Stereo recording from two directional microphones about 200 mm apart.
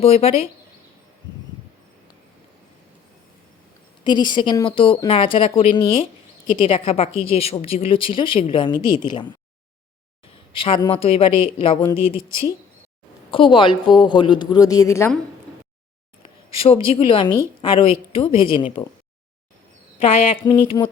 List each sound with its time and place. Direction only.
0.0 s speech: 30° left (ahead or behind)
4.0 s speech: 20° left (ahead or behind)
10.5 s speech: 25° left (ahead or behind)
11.9 s speech: 15° right (ahead or behind)
13.3 s speech: 25° left (ahead or behind)
16.6 s speech: 30° left (ahead or behind)
20.0 s speech: 30° left (ahead or behind)